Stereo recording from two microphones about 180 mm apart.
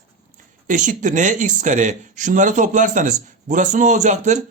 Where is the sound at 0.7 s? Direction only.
45° right (ahead or behind).